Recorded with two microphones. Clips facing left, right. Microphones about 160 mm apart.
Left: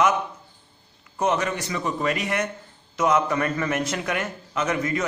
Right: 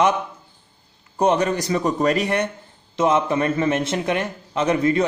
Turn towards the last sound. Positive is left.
turn(degrees=-30)  # may be behind; listen again after turning